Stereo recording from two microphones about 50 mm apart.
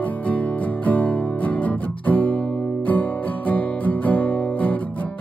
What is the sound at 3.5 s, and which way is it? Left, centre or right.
Music, left.